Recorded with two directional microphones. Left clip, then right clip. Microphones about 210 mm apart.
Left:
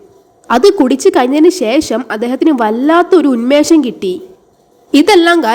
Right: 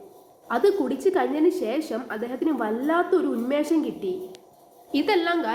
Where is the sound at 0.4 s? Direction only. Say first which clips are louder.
Left 14 dB; 50° left (ahead or behind).